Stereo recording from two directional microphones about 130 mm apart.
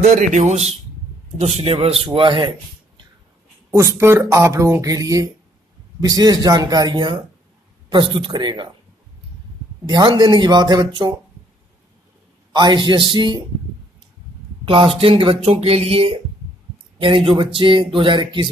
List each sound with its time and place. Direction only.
0.0 s speech: 65° right (ahead or behind); by 2.5 s 40° right (ahead or behind)
3.7 s speech: 20° right (ahead or behind)
9.8 s speech: 35° right (ahead or behind)
12.5 s speech: 35° right (ahead or behind)
14.6 s speech: 40° right (ahead or behind)